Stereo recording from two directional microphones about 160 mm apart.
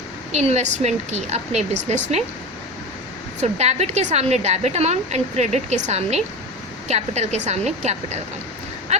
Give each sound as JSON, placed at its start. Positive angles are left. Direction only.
{"t": 0.3, "sound": "a woman's voice", "side_deg": -45}
{"t": 3.4, "sound": "a woman's voice", "side_deg": -40}